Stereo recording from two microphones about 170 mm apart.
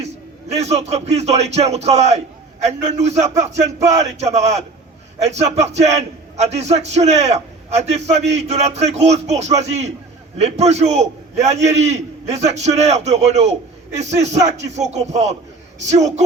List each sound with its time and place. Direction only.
0.5 s a man's voice: 40° right (ahead or behind)
3.3 s a sound: 20° right (ahead or behind)
4.2 s a man's voice: 40° right (ahead or behind)